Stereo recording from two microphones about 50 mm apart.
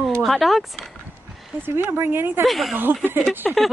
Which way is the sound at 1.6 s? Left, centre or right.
Right.